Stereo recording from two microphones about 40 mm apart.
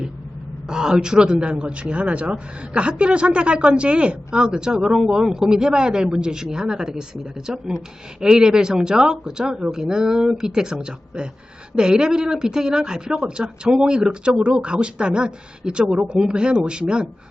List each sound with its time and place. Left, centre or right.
0.7 s a man's voice: centre